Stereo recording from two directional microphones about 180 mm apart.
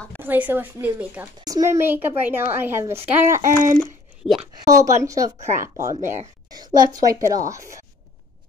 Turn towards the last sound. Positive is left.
turn(degrees=-20)  # may be behind; listen again after turning